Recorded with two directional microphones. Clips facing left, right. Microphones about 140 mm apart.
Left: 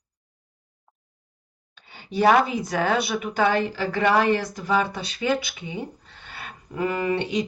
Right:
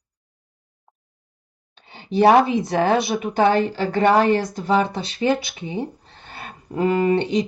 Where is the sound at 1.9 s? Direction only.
25° right (ahead or behind).